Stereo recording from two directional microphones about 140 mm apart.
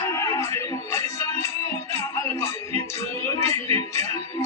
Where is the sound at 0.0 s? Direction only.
20° left (ahead or behind).